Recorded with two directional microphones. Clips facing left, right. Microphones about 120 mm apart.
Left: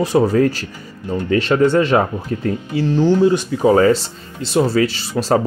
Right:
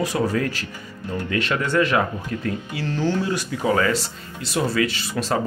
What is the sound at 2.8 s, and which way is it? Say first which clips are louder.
Speech: left 9 dB; 15° left (ahead or behind).